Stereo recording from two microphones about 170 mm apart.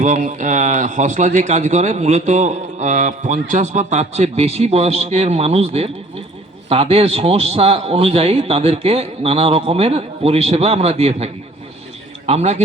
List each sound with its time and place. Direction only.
0.0 s a man's voice: 45° right (ahead or behind)